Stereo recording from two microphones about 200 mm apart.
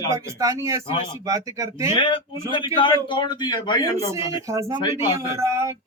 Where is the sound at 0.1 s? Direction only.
15° right (ahead or behind).